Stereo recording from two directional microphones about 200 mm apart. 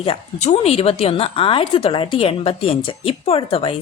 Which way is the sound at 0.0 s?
30° left (ahead or behind).